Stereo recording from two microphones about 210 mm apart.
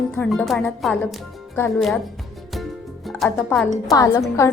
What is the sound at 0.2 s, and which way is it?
A woman's voice, centre (ahead or behind).